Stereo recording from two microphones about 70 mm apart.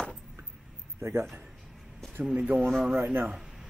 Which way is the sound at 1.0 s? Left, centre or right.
Right.